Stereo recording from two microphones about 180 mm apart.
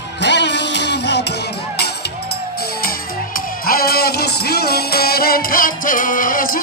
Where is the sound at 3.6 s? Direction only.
55° left (ahead or behind).